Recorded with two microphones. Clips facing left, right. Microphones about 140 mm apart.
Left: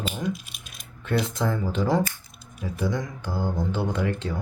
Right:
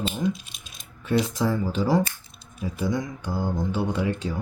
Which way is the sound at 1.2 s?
5° right (ahead or behind).